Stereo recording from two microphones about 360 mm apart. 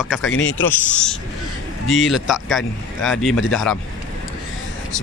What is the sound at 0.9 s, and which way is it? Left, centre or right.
Speech, centre.